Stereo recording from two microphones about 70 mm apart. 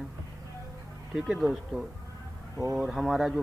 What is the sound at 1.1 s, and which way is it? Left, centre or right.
Speech, centre.